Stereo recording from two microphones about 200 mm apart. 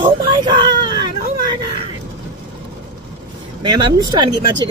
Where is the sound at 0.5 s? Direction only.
20° right (ahead or behind).